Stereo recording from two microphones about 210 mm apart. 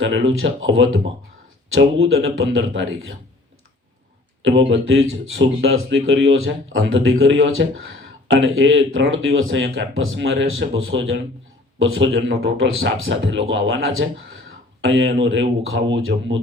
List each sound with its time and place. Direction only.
0.0 s speech: 65° right (ahead or behind)
4.4 s speech: 65° right (ahead or behind)